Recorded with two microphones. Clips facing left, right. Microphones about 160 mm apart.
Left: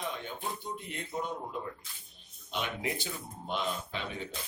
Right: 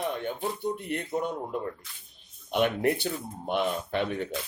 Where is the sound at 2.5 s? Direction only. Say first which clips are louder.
Right 10 dB; 60° right (ahead or behind).